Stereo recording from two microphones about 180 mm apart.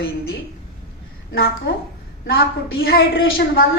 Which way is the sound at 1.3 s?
65° left (ahead or behind).